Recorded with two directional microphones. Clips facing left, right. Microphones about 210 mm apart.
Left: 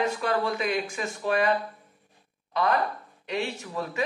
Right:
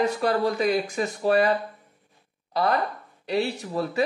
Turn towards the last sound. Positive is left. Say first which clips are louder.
# right 5 dB
turn(degrees=-35)  # may be behind; listen again after turning